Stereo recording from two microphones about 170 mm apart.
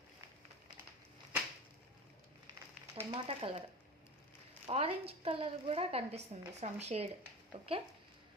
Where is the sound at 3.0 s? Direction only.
35° right (ahead or behind).